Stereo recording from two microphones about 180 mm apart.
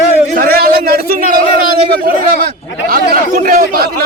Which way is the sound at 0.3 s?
60° right (ahead or behind).